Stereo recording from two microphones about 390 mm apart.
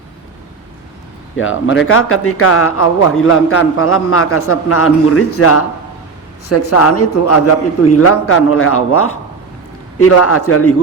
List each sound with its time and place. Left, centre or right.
1.4 s speech: left